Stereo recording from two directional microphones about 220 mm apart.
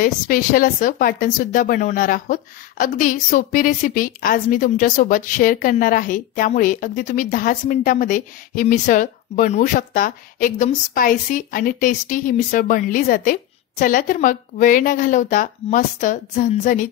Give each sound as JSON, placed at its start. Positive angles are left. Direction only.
{"t": 0.0, "sound": "speech", "side_deg": 40}